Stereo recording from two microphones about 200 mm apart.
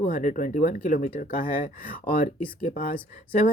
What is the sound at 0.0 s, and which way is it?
Speech, 40° left (ahead or behind).